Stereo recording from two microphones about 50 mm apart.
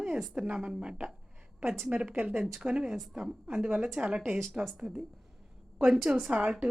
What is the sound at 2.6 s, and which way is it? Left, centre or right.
Speech, centre.